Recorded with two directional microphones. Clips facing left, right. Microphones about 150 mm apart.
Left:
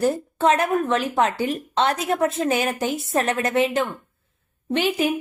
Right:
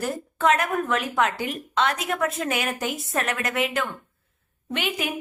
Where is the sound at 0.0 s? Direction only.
30° left (ahead or behind).